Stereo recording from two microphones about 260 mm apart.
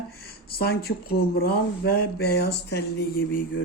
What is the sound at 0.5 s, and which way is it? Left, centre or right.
Speech, left.